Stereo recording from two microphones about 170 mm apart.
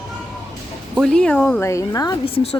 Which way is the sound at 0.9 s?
5° left (ahead or behind).